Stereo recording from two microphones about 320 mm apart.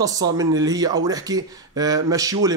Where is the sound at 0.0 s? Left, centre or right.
Centre.